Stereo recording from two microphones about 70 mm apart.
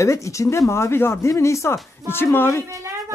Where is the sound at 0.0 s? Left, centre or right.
Left.